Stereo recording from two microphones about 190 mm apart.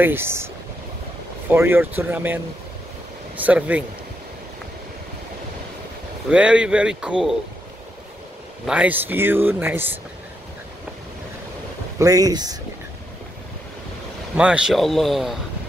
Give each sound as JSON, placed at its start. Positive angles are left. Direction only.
{"t": 0.0, "sound": "speech", "side_deg": -10}
{"t": 1.5, "sound": "speech", "side_deg": -10}
{"t": 6.3, "sound": "speech", "side_deg": -5}
{"t": 8.6, "sound": "speech", "side_deg": -5}
{"t": 12.0, "sound": "speech", "side_deg": -20}
{"t": 14.3, "sound": "speech", "side_deg": -5}